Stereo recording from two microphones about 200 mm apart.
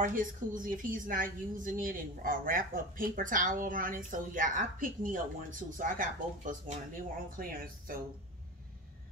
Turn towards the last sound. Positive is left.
turn(degrees=-45)  # may be behind; listen again after turning